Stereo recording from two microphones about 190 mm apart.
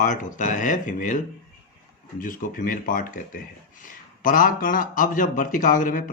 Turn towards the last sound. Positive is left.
turn(degrees=45)  # may be behind; listen again after turning